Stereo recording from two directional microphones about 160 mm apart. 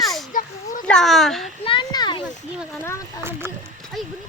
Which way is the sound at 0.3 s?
55° left (ahead or behind).